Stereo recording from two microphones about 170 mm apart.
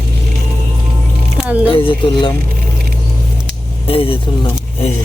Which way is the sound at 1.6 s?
30° left (ahead or behind).